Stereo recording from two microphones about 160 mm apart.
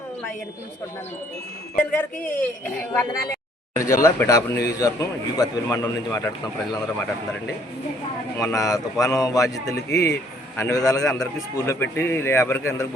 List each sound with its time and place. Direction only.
1.7 s a man's voice: 10° left (ahead or behind)
8.4 s a man's voice: 20° left (ahead or behind)